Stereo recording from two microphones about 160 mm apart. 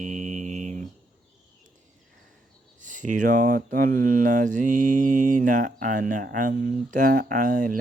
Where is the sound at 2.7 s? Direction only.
55° right (ahead or behind).